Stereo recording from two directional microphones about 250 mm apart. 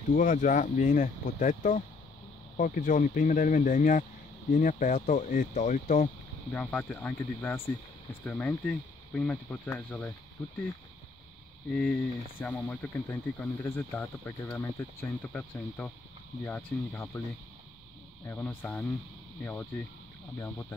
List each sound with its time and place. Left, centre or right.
0.1 s speech: left
6.5 s speech: centre
11.7 s speech: centre
18.2 s speech: centre